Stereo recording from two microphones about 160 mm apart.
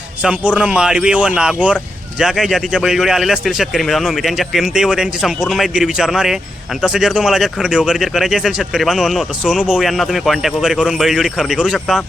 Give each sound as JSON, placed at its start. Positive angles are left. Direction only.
{"t": 0.2, "sound": "speech", "side_deg": -10}